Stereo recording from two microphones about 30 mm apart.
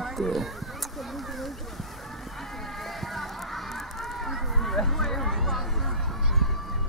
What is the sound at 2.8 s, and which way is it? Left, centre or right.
Honk, centre.